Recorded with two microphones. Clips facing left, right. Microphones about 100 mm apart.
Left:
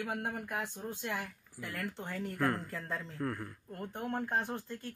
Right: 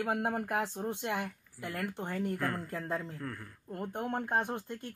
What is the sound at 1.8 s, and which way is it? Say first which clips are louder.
Speech: right 3 dB; 20° right (ahead or behind).